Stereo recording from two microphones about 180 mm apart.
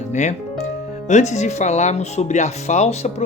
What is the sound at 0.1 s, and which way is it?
Speech, 40° left (ahead or behind).